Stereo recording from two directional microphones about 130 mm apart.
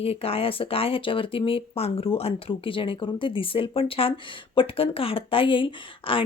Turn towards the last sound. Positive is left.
turn(degrees=45)  # may be behind; listen again after turning